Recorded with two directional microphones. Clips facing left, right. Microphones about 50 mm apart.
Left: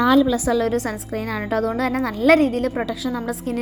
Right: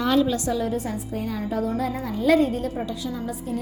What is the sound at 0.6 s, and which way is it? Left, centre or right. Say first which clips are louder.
A woman's voice: left 5 dB; left.